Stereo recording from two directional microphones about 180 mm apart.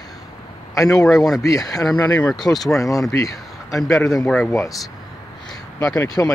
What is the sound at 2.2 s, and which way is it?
Speech, 5° left (ahead or behind).